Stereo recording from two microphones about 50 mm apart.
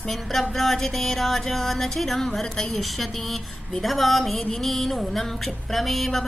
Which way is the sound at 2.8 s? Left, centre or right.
Centre.